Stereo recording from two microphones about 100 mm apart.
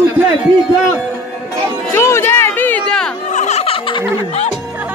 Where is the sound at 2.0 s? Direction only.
25° left (ahead or behind).